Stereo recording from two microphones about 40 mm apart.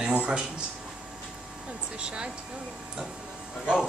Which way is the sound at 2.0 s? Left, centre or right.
Right.